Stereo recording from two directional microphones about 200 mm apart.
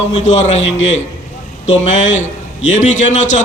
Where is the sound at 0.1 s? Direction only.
35° left (ahead or behind).